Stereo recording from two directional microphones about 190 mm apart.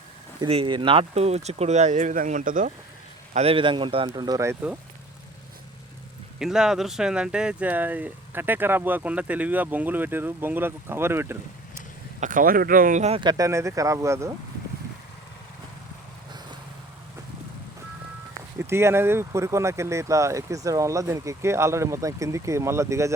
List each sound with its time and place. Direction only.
0.3 s speech: 25° right (ahead or behind); by 2.7 s 45° right (ahead or behind)
3.3 s speech: 30° right (ahead or behind); by 4.8 s 10° right (ahead or behind)
6.4 s speech: 5° right (ahead or behind)
12.2 s speech: 45° right (ahead or behind); by 14.3 s 15° right (ahead or behind)
18.6 s speech: 15° right (ahead or behind)